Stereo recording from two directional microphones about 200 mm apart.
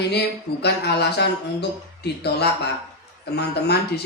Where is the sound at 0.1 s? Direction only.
55° left (ahead or behind).